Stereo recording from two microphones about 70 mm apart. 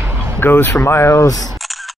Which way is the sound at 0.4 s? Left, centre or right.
Left.